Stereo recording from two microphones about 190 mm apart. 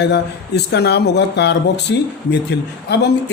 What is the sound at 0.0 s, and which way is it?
Speech, 65° left (ahead or behind).